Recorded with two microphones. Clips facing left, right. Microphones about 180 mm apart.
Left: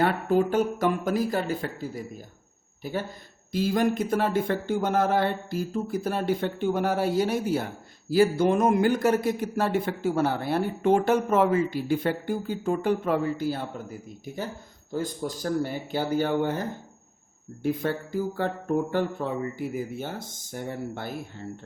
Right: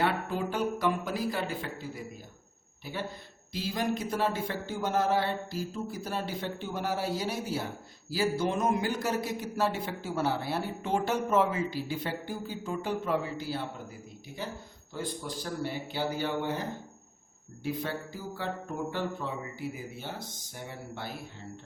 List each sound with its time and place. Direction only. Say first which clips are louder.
0.0 s speech: left 7 dB; 45° left (ahead or behind)
2.8 s speech: left 5 dB; 45° left (ahead or behind)
14.9 s speech: left 6 dB; 45° left (ahead or behind)